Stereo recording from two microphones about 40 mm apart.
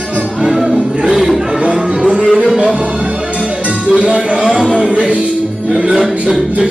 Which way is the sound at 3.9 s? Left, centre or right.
Right.